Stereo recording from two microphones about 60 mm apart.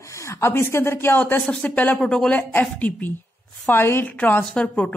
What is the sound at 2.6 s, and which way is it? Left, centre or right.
Speech, left.